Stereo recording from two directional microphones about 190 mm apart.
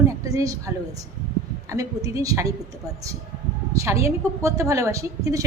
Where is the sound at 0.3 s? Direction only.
20° right (ahead or behind).